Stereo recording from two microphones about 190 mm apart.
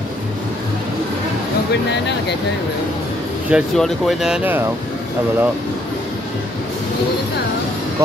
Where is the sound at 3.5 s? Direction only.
Centre (ahead or behind).